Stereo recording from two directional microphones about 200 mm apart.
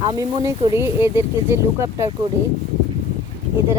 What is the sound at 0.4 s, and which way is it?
Speech, 15° right (ahead or behind).